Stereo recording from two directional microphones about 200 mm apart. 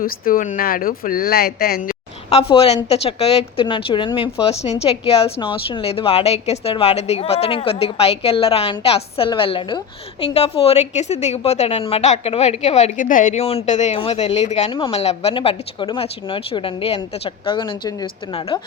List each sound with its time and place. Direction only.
0.0 s speech: 45° left (ahead or behind)
2.3 s a woman's voice: 30° left (ahead or behind)